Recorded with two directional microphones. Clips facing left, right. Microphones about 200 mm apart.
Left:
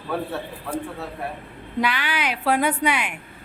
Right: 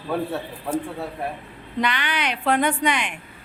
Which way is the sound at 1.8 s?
5° left (ahead or behind).